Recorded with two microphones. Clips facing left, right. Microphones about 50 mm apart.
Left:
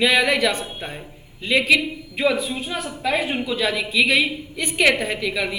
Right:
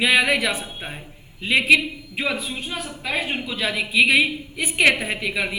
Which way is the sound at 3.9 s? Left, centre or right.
Centre.